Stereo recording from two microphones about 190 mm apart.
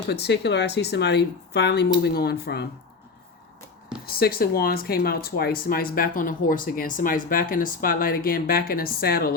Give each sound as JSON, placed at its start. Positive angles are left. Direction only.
{"t": 0.1, "sound": "speech", "side_deg": 60}
{"t": 4.0, "sound": "speech", "side_deg": 50}